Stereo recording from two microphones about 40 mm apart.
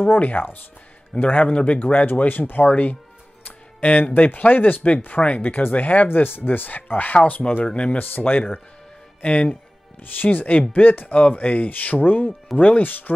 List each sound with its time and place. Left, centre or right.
0.0 s speech: left
1.1 s speech: left
2.7 s speech: left
3.4 s music: left
4.1 s speech: left
5.2 s speech: left
6.1 s speech: left
7.6 s speech: left
8.2 s speech: left
9.2 s speech: left
10.0 s speech: left